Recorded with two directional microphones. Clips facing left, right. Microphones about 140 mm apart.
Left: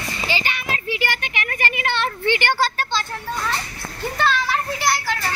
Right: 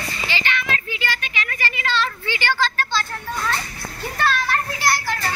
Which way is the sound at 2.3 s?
55° left (ahead or behind).